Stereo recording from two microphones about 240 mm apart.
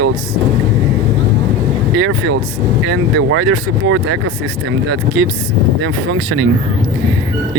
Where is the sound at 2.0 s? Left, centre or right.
Right.